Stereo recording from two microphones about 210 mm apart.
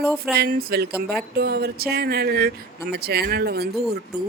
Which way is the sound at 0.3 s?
50° right (ahead or behind).